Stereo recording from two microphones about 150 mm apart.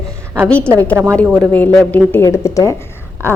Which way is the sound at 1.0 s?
20° right (ahead or behind).